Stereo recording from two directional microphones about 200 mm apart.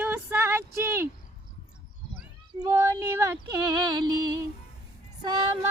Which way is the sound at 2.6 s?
15° right (ahead or behind).